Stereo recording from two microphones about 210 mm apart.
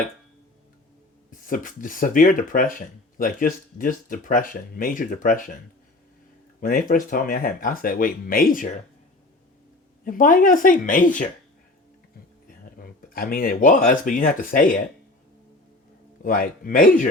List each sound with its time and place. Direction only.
1.3 s speech: 40° left (ahead or behind)
6.6 s speech: 40° left (ahead or behind)
10.0 s speech: 40° left (ahead or behind)
12.8 s speech: 40° left (ahead or behind)
16.2 s speech: 40° left (ahead or behind)